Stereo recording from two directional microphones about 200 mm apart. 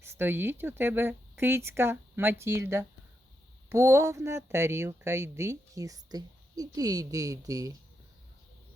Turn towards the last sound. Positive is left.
turn(degrees=-20)  # may be behind; listen again after turning